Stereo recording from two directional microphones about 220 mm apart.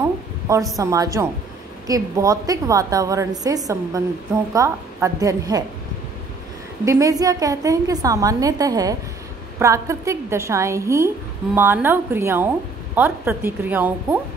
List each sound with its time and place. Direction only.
0.7 s a woman's voice: 15° right (ahead or behind)
6.8 s a woman's voice: 15° right (ahead or behind)